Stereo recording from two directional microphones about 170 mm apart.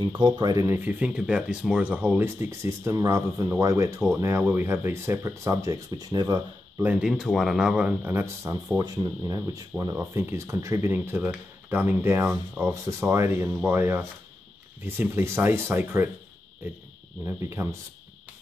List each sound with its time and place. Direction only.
0.0 s a man's voice: 25° right (ahead or behind)
6.8 s a man's voice: 5° right (ahead or behind)